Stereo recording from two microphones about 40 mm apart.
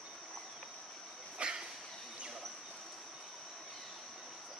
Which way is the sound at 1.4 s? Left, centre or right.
Right.